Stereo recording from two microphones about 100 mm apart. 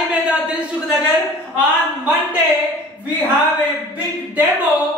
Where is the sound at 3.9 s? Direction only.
15° right (ahead or behind).